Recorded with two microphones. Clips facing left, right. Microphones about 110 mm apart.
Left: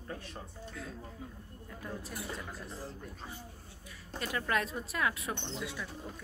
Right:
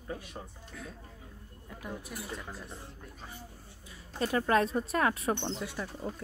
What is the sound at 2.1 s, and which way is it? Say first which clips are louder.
Speech: even; centre (ahead or behind).